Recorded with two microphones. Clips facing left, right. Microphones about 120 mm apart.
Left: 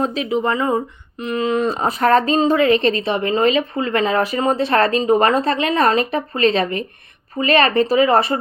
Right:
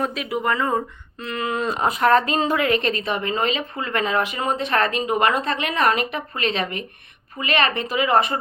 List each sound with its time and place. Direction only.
0.0 s speech: 30° left (ahead or behind)
1.7 s speech: 35° left (ahead or behind)